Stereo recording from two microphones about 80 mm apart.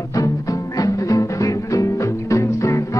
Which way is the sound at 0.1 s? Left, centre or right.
Left.